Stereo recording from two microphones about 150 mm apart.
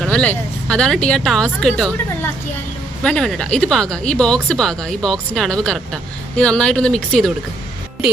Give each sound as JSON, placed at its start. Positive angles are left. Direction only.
{"t": 0.0, "sound": "speech", "side_deg": 5}